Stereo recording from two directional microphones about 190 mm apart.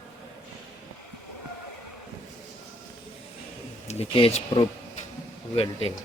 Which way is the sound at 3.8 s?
30° left (ahead or behind).